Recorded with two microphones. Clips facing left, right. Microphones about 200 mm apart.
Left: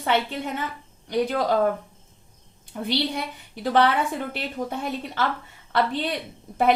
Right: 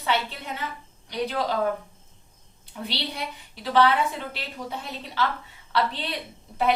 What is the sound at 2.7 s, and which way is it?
A woman's voice, 50° left (ahead or behind).